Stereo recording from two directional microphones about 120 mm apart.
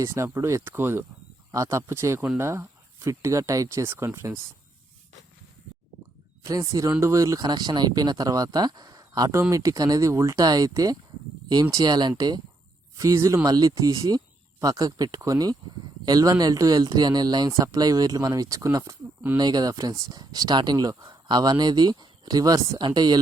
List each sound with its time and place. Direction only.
0.0 s speech: 25° right (ahead or behind)
6.4 s speech: 25° right (ahead or behind)